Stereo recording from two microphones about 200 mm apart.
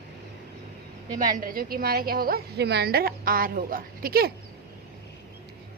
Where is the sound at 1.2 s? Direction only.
45° right (ahead or behind).